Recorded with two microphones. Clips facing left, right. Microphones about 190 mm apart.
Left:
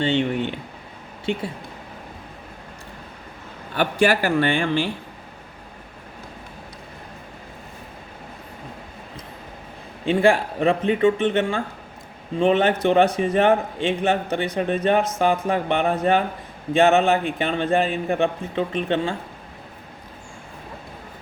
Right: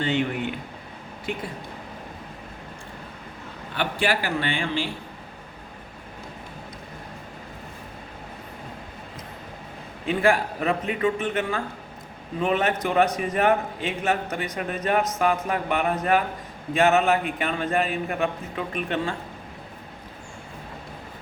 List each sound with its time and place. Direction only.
0.0 s speech: 30° left (ahead or behind)
3.8 s a man's voice: 45° left (ahead or behind)
10.1 s speech: 30° left (ahead or behind)